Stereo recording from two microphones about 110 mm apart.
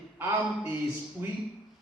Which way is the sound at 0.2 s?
20° right (ahead or behind).